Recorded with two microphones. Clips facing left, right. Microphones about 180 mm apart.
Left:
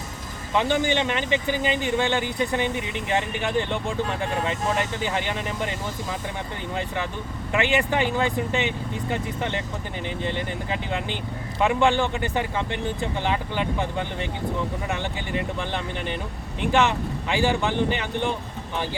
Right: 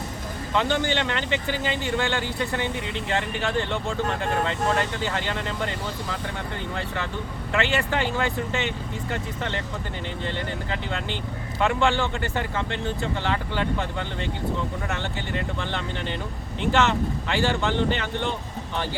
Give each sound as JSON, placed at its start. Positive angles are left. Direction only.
{"t": 0.5, "sound": "speech", "side_deg": 15}